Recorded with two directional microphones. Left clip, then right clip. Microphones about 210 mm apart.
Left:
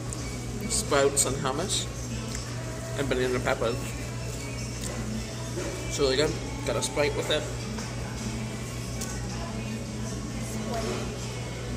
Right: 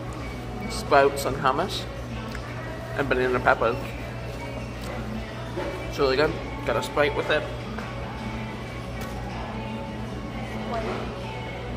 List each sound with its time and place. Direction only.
0.7 s a man's voice: 20° left (ahead or behind)
3.0 s speech: 20° left (ahead or behind)
5.9 s speech: 20° left (ahead or behind)